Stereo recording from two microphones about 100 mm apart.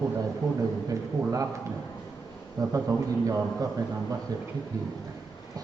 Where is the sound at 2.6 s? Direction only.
40° right (ahead or behind).